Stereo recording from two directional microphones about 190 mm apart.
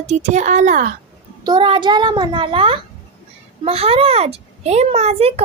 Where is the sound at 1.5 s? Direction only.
25° right (ahead or behind).